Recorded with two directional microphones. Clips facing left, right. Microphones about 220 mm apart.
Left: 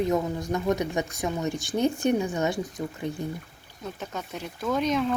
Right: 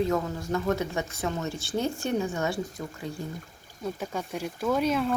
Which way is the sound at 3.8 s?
10° right (ahead or behind).